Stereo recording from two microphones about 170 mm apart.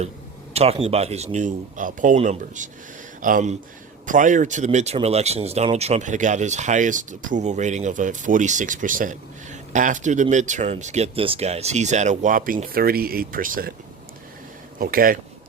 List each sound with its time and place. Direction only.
0.5 s a man's voice: 35° right (ahead or behind); by 13.7 s 55° right (ahead or behind)
14.8 s speech: 60° right (ahead or behind)